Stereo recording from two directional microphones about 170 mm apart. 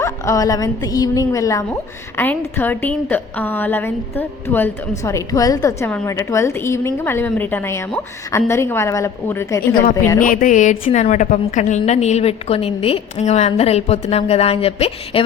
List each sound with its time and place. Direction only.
0.0 s a woman's voice: 20° left (ahead or behind)
10.2 s a woman's voice: 50° left (ahead or behind); by 15.2 s 35° left (ahead or behind)